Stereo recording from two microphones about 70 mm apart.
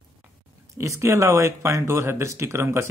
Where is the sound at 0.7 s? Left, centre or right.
Right.